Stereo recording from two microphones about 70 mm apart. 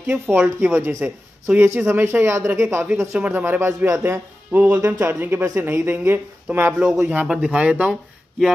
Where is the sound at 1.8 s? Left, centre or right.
Right.